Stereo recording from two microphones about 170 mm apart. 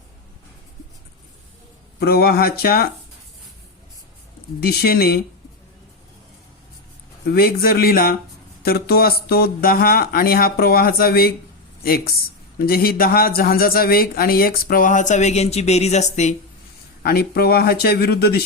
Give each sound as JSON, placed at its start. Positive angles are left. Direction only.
{"t": 2.0, "sound": "speech", "side_deg": 65}
{"t": 4.6, "sound": "speech", "side_deg": 65}
{"t": 7.3, "sound": "speech", "side_deg": 65}
{"t": 17.0, "sound": "speech", "side_deg": 65}